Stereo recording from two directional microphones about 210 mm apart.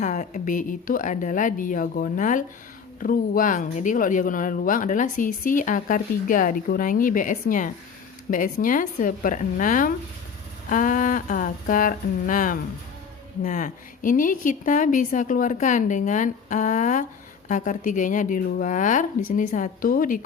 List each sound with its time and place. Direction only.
0.0 s speech: 35° left (ahead or behind)